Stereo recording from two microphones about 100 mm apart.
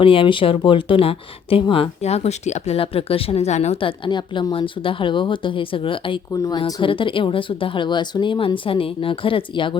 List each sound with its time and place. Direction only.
0.0 s speech: 60° left (ahead or behind)
6.3 s speech: 35° left (ahead or behind)
6.8 s speech: 60° left (ahead or behind)